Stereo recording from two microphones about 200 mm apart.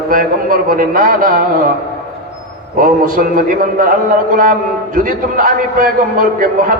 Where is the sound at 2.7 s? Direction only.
45° right (ahead or behind).